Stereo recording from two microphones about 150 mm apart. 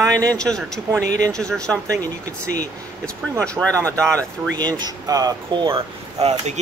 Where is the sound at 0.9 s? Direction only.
20° right (ahead or behind).